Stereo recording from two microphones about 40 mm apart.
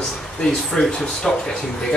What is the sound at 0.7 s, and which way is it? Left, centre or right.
Speech, centre.